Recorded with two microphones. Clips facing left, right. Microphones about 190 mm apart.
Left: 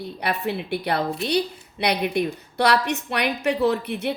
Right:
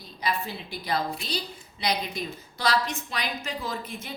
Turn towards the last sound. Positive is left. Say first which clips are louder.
# left 12 dB
turn(degrees=70)  # may be behind; listen again after turning